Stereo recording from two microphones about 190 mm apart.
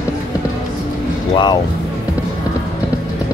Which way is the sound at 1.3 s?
20° left (ahead or behind).